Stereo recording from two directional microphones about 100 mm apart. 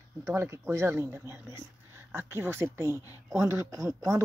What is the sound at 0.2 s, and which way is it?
Speech, 25° right (ahead or behind).